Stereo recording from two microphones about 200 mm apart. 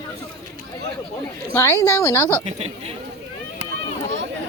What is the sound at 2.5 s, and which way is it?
Speech, 30° right (ahead or behind).